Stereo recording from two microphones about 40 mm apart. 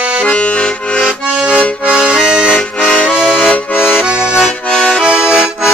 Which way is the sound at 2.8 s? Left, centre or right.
Left.